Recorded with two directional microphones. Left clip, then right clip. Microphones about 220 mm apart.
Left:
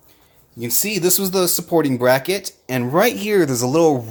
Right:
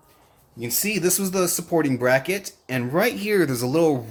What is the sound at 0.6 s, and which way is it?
Speech, 20° left (ahead or behind).